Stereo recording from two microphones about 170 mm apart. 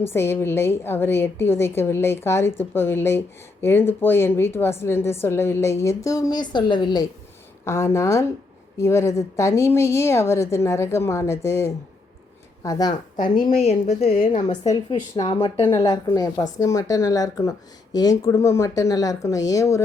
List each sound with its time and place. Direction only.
0.0 s a woman's voice: 15° left (ahead or behind)
7.6 s a woman's voice: 15° left (ahead or behind)
13.2 s a woman's voice: 30° left (ahead or behind)
14.5 s a woman's voice: 40° left (ahead or behind)
14.8 s a woman's voice: 30° left (ahead or behind)